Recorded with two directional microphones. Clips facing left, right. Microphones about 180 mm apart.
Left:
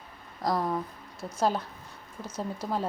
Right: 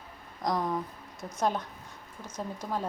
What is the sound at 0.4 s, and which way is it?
Speech, 5° left (ahead or behind).